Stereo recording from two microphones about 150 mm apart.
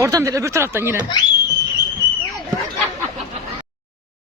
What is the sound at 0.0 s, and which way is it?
Speech, 20° right (ahead or behind).